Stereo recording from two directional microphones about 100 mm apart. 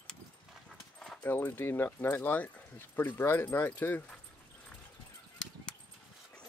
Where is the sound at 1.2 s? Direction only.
20° left (ahead or behind).